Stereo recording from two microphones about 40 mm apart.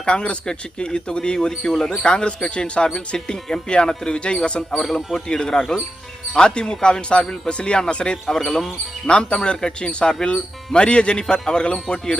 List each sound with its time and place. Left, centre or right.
0.0 s speech: left
4.7 s speech: centre; by 8.2 s left
8.3 s speech: centre
9.0 s speech: left